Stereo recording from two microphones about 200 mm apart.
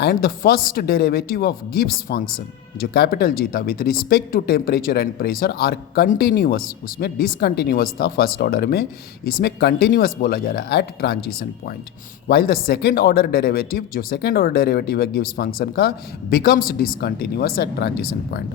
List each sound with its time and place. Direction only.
0.0 s speech: 50° left (ahead or behind)